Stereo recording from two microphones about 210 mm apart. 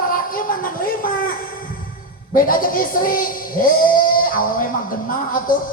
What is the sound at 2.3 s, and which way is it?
Speech, 40° left (ahead or behind).